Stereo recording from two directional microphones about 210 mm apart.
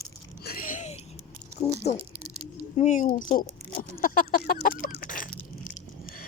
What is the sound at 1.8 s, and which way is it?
Speech, 30° left (ahead or behind).